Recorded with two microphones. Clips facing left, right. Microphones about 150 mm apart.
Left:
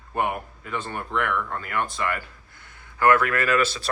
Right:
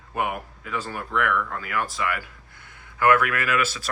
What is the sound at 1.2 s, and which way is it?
Speech, 30° left (ahead or behind).